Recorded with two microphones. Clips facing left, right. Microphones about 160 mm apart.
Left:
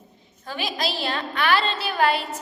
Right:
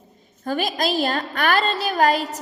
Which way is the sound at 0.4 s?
45° right (ahead or behind).